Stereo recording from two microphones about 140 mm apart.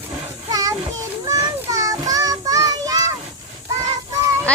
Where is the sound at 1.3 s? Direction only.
25° right (ahead or behind).